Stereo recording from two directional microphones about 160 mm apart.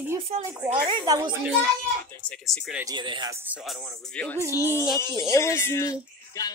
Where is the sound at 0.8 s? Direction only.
25° right (ahead or behind).